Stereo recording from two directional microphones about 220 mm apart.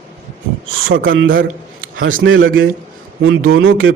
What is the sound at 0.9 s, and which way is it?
A man's voice, 60° right (ahead or behind).